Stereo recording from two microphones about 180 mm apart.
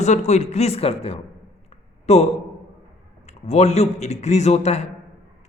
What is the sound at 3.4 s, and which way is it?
Speech, 35° left (ahead or behind).